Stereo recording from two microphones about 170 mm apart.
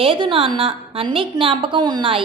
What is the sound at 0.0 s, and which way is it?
A woman's voice, 30° right (ahead or behind).